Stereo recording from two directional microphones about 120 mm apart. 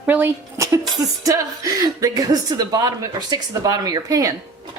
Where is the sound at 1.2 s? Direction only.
25° right (ahead or behind).